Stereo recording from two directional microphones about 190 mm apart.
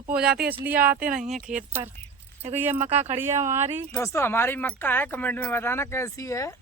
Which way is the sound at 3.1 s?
15° right (ahead or behind).